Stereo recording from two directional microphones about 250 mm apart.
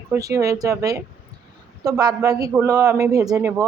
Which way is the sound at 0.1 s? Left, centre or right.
Centre.